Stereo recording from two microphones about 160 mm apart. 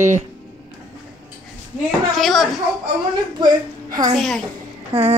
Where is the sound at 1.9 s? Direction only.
Centre (ahead or behind).